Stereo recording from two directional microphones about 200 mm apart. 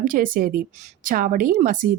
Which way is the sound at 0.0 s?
45° right (ahead or behind).